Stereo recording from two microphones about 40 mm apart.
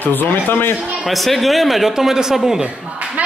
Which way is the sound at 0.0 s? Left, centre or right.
Left.